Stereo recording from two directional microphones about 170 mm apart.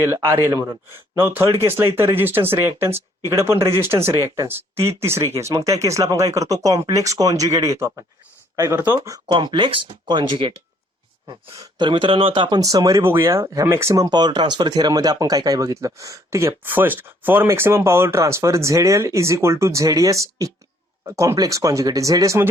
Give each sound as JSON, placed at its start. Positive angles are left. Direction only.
{"t": 0.0, "sound": "speech", "side_deg": -15}
{"t": 9.3, "sound": "speech", "side_deg": -25}